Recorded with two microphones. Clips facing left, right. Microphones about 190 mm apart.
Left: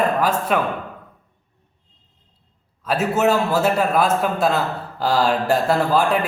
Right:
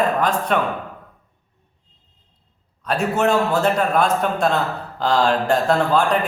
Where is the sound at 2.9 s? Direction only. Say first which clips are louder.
Left 1 dB; 5° left (ahead or behind).